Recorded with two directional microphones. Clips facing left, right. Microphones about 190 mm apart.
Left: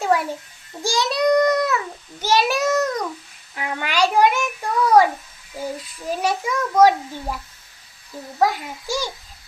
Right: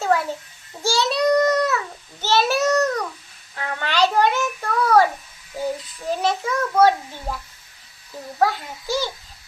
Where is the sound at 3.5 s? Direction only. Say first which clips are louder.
Even; 15° left (ahead or behind).